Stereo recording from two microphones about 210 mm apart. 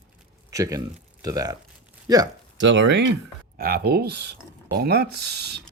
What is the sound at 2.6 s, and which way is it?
Speech, 60° right (ahead or behind).